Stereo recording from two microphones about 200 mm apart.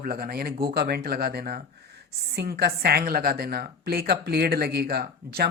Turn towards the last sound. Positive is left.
turn(degrees=-50)  # may be behind; listen again after turning